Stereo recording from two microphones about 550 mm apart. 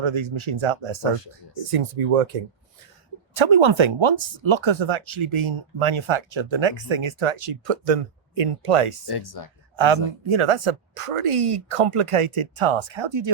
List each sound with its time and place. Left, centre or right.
0.0 s speech: right
1.1 s speech: left
1.7 s speech: right
3.3 s speech: right
9.0 s speech: left
9.7 s speech: right